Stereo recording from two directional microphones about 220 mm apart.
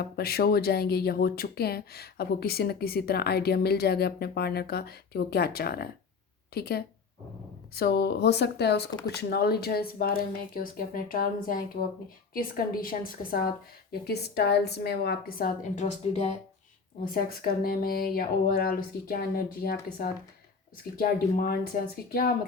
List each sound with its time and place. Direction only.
0.0 s speech: 45° left (ahead or behind)
17.2 s speech: 45° left (ahead or behind)
20.9 s speech: 40° left (ahead or behind)